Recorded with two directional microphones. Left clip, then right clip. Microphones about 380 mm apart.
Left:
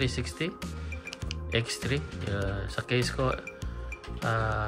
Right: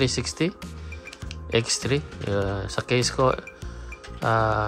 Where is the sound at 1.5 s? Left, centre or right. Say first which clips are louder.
Right 7 dB; centre.